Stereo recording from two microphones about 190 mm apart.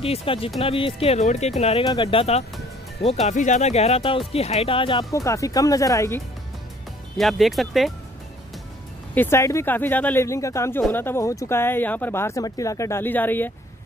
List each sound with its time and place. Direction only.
0.0 s speech: 30° left (ahead or behind); by 6.2 s 15° left (ahead or behind)
7.2 s speech: centre (ahead or behind)
9.1 s speech: 10° left (ahead or behind)